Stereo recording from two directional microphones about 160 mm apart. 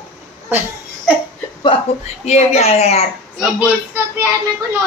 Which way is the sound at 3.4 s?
5° right (ahead or behind).